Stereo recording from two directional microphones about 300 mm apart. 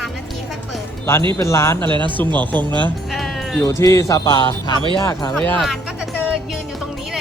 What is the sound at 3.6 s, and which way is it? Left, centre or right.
Speech, centre.